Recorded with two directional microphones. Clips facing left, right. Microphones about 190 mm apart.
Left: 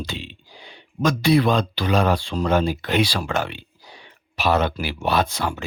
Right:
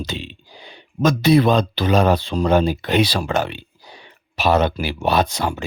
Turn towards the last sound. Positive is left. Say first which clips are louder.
# right 3 dB
turn(degrees=-20)  # may be behind; listen again after turning